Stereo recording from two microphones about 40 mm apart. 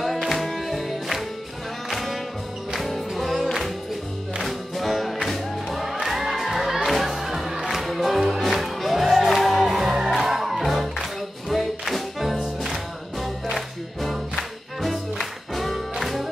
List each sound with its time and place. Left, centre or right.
0.0 s music: centre